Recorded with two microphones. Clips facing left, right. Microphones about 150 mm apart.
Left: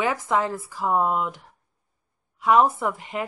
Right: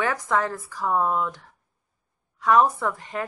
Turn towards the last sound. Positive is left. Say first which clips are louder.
# left 1 dB
turn(degrees=15)  # may be behind; listen again after turning